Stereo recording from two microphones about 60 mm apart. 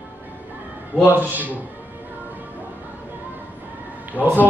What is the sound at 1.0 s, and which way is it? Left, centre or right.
Mantra, right.